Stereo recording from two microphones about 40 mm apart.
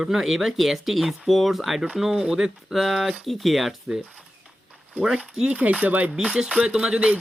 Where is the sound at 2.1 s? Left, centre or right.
Right.